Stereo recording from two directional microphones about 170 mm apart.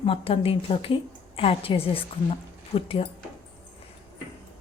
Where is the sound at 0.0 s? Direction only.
35° left (ahead or behind).